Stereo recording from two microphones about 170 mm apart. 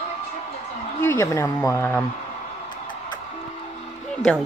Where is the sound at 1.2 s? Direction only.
15° left (ahead or behind).